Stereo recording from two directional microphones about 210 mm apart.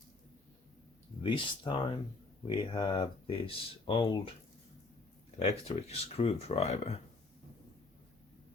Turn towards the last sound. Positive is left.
turn(degrees=30)  # may be behind; listen again after turning